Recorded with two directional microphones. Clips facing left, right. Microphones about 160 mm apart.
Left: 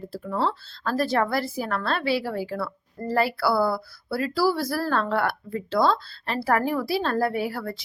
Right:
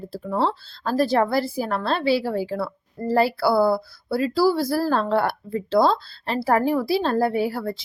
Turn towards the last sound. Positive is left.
turn(degrees=-25)  # may be behind; listen again after turning